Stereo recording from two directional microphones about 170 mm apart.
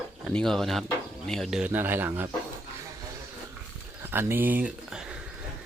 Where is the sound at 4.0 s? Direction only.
15° right (ahead or behind).